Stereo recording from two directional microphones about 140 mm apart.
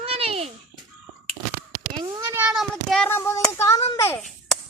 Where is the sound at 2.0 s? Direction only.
20° right (ahead or behind).